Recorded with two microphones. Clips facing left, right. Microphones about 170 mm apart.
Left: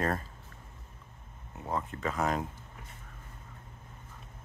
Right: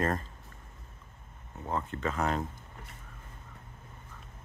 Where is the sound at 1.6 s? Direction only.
5° left (ahead or behind).